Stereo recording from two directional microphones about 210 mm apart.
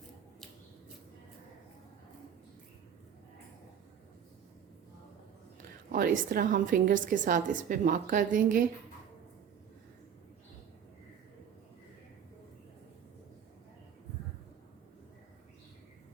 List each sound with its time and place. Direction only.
5.9 s a woman's voice: 40° right (ahead or behind)